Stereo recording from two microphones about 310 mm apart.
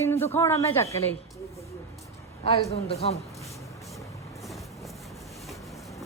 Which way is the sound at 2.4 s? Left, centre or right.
Centre.